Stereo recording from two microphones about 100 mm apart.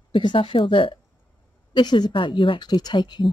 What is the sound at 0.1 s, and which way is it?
Speech, 55° left (ahead or behind).